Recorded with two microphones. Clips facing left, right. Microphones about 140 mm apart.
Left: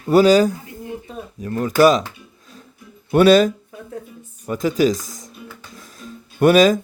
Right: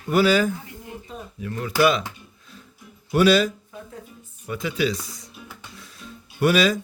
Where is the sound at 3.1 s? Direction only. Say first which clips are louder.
Left 6 dB; 50° left (ahead or behind).